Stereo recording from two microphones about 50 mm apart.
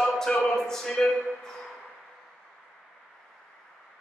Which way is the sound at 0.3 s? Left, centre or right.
Left.